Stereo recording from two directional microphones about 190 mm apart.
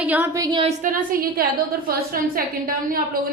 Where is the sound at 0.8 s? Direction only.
45° right (ahead or behind).